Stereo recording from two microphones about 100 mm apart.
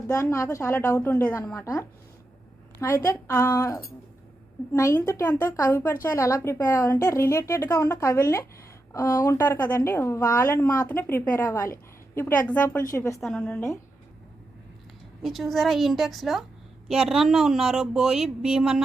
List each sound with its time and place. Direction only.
0.1 s a woman's voice: 30° left (ahead or behind)
9.6 s a woman's voice: 20° left (ahead or behind)
12.9 s a woman's voice: 30° left (ahead or behind)
13.2 s a woman's voice: 10° left (ahead or behind)
15.2 s a woman's voice: centre (ahead or behind)